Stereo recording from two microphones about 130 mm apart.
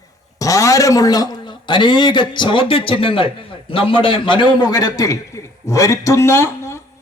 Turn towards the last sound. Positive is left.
turn(degrees=20)  # may be behind; listen again after turning